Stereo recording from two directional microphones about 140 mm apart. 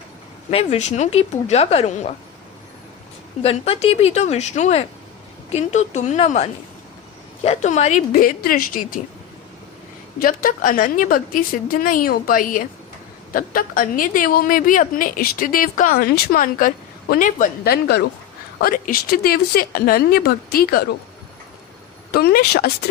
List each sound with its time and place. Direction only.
0.5 s a woman's voice: 50° left (ahead or behind)
3.4 s a woman's voice: 45° left (ahead or behind)
8.2 s a woman's voice: 90° left
10.2 s a woman's voice: 90° left
22.1 s a woman's voice: 90° left